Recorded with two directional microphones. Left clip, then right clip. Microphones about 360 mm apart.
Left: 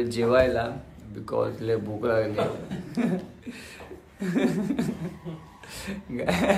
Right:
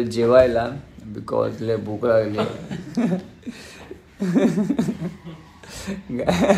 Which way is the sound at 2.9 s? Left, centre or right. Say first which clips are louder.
Right 4 dB; centre.